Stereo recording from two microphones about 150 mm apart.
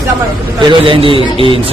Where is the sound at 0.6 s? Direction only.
35° right (ahead or behind).